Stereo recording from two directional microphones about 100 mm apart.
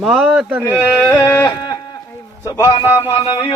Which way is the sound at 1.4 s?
45° left (ahead or behind).